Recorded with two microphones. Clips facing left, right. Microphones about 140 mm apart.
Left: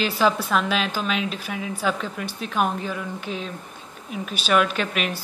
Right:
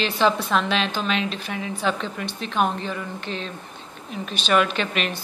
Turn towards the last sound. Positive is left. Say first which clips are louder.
# even
turn(degrees=5)  # may be behind; listen again after turning